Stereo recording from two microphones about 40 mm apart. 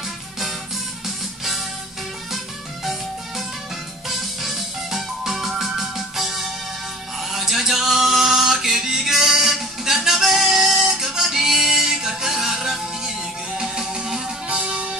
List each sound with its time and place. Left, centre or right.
1.0 s music: centre
14.6 s music: right